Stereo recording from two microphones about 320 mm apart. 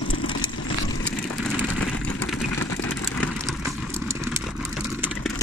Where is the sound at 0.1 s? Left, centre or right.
Left.